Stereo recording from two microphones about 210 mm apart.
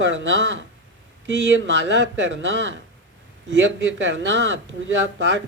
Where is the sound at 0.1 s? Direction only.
60° right (ahead or behind).